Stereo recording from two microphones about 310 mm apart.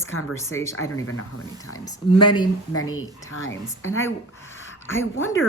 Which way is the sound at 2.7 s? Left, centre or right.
Left.